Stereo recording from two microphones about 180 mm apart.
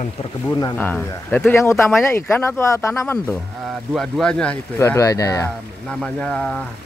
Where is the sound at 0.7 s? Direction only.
10° left (ahead or behind).